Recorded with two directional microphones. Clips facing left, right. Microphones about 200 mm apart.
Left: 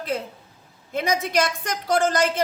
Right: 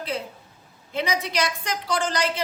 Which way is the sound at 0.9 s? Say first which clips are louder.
Left 3 dB; 45° left (ahead or behind).